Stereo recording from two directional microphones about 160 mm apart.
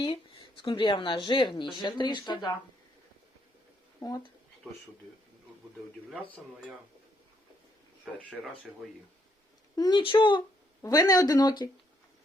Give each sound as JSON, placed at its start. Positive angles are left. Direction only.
{"t": 0.0, "sound": "speech", "side_deg": 30}
{"t": 4.0, "sound": "speech", "side_deg": 25}
{"t": 9.7, "sound": "speech", "side_deg": 25}